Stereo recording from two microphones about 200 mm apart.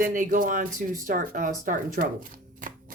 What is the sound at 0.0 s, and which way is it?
Speech, 40° right (ahead or behind).